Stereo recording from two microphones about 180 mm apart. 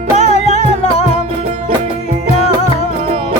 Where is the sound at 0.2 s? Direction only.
35° left (ahead or behind).